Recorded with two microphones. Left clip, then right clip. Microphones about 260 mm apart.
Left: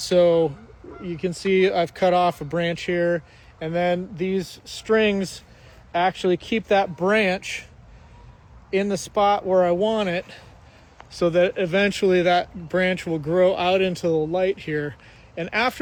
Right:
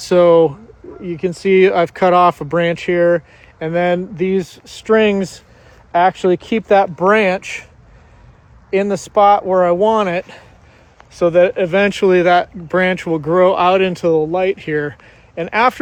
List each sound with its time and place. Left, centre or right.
0.0 s speech: right
8.7 s speech: right